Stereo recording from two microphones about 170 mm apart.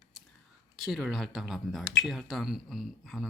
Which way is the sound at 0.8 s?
Centre (ahead or behind).